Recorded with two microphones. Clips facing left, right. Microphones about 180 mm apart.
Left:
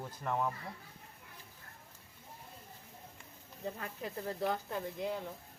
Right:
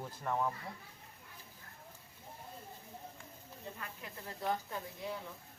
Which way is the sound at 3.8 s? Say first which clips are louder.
Left 7 dB; 35° left (ahead or behind).